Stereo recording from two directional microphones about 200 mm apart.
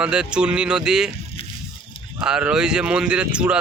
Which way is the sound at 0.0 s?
5° right (ahead or behind).